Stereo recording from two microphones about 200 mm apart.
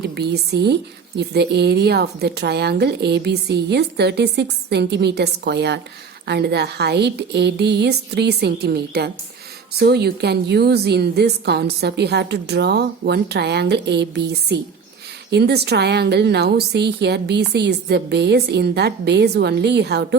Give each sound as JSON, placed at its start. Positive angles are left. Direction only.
{"t": 0.0, "sound": "a woman's voice", "side_deg": -55}